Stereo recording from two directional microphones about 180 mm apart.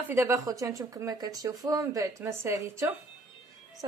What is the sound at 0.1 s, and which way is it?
A woman's voice, 15° right (ahead or behind).